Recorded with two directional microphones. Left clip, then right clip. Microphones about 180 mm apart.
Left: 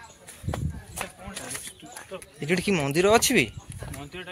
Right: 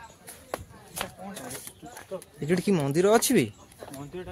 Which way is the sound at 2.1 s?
15° right (ahead or behind).